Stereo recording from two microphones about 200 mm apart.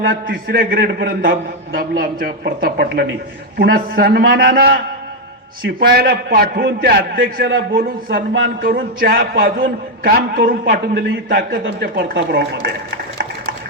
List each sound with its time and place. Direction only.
0.3 s a man's voice: 50° right (ahead or behind)